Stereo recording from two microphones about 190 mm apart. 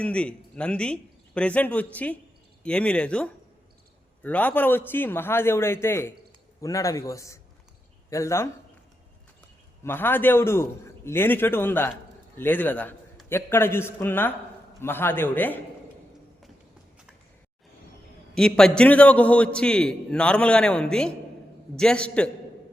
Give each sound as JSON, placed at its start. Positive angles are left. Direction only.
{"t": 0.0, "sound": "a man's voice", "side_deg": 5}
{"t": 9.8, "sound": "a man's voice", "side_deg": 10}
{"t": 18.3, "sound": "a man's voice", "side_deg": 5}